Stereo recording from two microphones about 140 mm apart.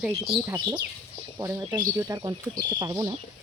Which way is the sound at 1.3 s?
20° right (ahead or behind).